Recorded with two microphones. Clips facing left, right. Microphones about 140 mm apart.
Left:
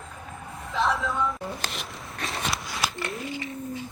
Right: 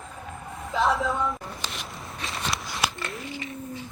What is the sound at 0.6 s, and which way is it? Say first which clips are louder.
Vehicle: right 2 dB; centre (ahead or behind).